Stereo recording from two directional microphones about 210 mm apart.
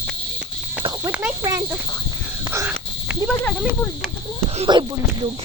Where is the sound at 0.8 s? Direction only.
20° right (ahead or behind).